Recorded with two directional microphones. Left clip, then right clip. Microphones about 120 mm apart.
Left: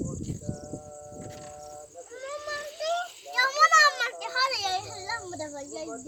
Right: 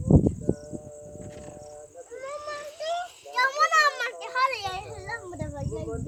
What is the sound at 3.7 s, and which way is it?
Children playing, 10° right (ahead or behind).